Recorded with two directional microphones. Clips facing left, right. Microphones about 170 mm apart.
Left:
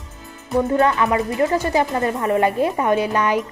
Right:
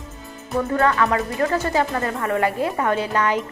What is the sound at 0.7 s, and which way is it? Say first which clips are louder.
Speech: left 1 dB; 20° left (ahead or behind).